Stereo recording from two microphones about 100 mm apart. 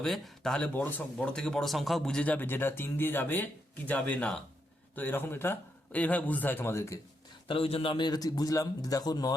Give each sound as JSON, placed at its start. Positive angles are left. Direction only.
{"t": 0.0, "sound": "a man's voice", "side_deg": 5}
{"t": 7.4, "sound": "a man's voice", "side_deg": 65}